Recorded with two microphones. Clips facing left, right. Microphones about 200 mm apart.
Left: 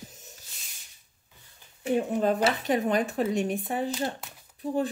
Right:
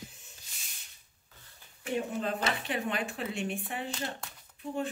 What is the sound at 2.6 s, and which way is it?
Speech, 40° left (ahead or behind).